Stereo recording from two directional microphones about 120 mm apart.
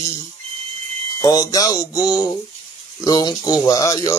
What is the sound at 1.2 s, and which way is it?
Speech, 30° left (ahead or behind).